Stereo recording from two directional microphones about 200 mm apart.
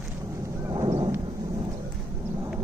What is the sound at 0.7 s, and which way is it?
Horse, 20° right (ahead or behind).